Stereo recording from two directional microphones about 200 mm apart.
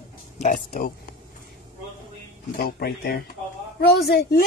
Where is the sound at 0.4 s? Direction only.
40° left (ahead or behind).